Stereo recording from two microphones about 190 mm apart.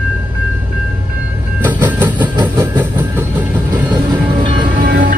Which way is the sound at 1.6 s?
10° right (ahead or behind).